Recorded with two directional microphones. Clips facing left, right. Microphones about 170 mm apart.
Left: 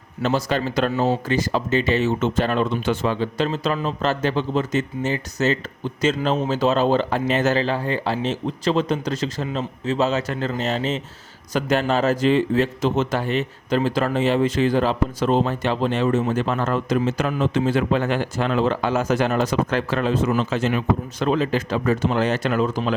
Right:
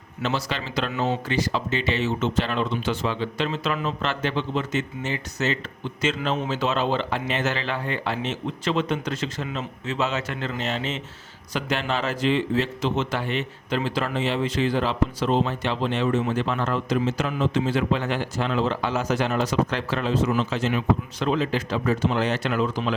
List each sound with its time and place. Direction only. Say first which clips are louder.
0.2 s a man's voice: left 6 dB; 45° left (ahead or behind)